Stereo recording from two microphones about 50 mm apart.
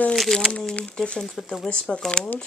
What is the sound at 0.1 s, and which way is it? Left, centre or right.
Speech, centre.